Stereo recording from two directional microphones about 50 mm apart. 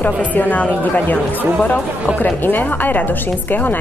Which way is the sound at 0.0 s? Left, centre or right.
Left.